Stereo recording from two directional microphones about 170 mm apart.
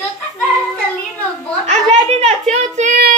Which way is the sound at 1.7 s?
40° right (ahead or behind).